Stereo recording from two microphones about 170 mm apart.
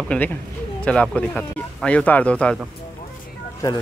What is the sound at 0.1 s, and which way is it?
Speech, 10° left (ahead or behind).